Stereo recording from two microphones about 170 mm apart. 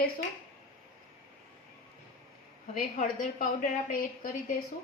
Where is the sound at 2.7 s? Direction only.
50° left (ahead or behind).